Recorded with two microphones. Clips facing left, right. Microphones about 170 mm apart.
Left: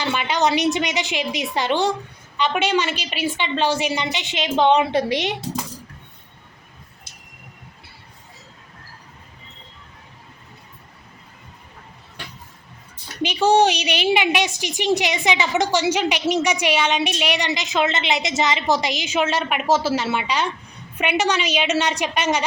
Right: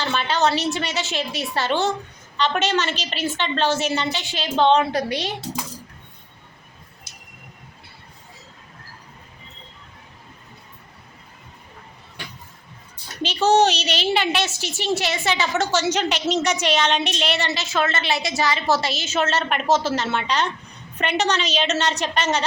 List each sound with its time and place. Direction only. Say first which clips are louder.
0.0 s a woman's voice: even; 10° left (ahead or behind)
4.9 s a woman's voice: left 3 dB; 25° left (ahead or behind)
13.2 s a woman's voice: left 1 dB; 10° left (ahead or behind)